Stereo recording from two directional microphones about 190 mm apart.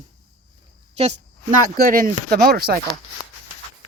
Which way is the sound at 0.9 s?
35° right (ahead or behind).